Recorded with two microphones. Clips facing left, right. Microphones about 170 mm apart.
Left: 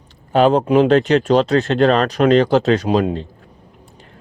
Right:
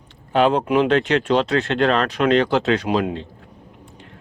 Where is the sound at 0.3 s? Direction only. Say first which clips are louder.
Left 4 dB; 40° left (ahead or behind).